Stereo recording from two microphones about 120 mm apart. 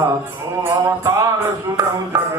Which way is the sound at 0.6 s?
30° right (ahead or behind).